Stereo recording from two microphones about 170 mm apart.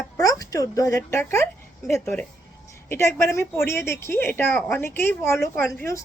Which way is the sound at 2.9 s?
15° left (ahead or behind).